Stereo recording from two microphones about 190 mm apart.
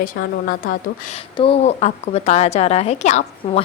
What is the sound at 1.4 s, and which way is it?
A woman's voice, 35° left (ahead or behind).